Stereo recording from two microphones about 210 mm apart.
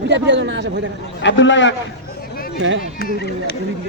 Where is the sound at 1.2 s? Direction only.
60° left (ahead or behind).